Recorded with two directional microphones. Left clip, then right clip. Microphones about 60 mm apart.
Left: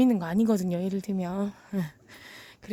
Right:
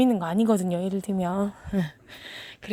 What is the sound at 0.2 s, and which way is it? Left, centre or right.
Speech, left.